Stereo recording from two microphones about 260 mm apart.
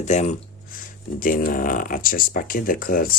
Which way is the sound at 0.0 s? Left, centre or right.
Left.